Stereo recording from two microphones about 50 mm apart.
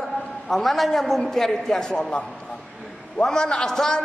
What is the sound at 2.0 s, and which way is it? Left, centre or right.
A man's voice, left.